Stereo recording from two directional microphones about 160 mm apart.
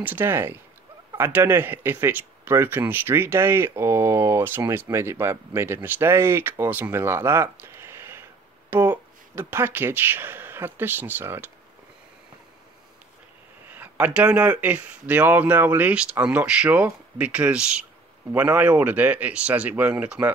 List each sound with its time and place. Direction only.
0.0 s speech: 10° right (ahead or behind)
13.7 s speech: 10° right (ahead or behind)